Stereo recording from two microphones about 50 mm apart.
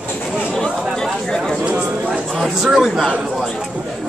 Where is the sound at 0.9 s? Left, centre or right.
Centre.